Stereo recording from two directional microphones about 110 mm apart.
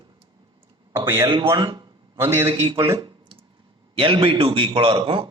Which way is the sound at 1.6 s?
45° right (ahead or behind).